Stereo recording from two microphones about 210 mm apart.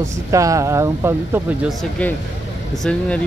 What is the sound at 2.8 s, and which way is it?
Speech, 5° left (ahead or behind).